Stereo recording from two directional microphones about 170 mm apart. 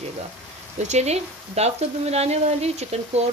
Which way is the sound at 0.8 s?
40° right (ahead or behind).